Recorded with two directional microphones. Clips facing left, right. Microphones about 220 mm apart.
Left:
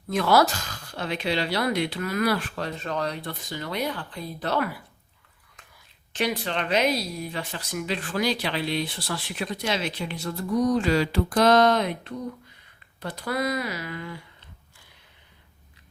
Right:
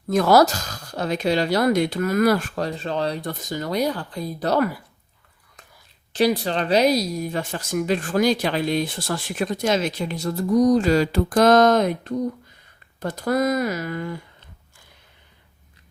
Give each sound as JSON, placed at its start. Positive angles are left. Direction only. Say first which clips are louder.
{"t": 0.1, "sound": "a woman's voice", "louder": "right 5 dB", "side_deg": -40}
{"t": 6.1, "sound": "speech", "louder": "right 7 dB", "side_deg": -35}